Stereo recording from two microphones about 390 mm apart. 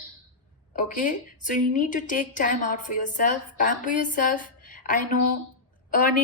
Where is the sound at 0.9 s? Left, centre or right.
Centre.